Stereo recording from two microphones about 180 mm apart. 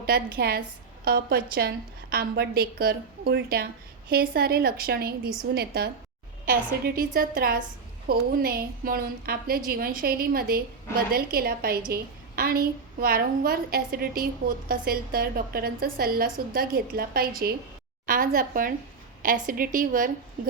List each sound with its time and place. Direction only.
0.0 s a woman's voice: 60° right (ahead or behind)